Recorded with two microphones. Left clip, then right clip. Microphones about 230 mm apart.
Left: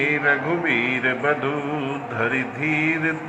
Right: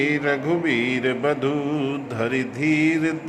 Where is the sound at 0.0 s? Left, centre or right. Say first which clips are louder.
Left 2 dB; right.